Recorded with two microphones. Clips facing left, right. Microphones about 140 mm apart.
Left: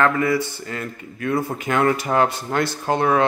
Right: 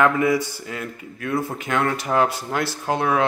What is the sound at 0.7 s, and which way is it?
Speech, 5° right (ahead or behind).